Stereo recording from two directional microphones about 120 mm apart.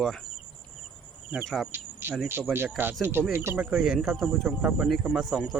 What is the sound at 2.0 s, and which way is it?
Speech, 20° right (ahead or behind).